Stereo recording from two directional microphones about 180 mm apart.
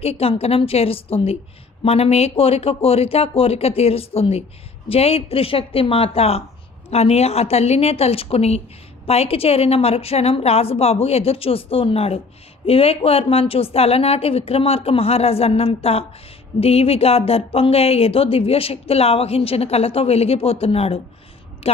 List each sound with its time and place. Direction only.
0.0 s a woman's voice: 35° left (ahead or behind)